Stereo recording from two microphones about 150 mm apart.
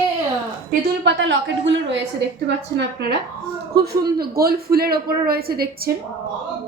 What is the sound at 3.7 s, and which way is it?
A woman's voice, 90° right.